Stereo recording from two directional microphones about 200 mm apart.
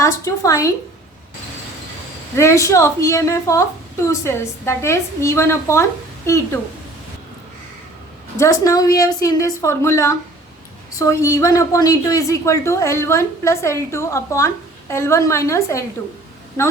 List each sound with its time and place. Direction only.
0.0 s a woman's voice: 15° left (ahead or behind)
2.3 s a woman's voice: 15° left (ahead or behind)
8.4 s a woman's voice: 15° left (ahead or behind)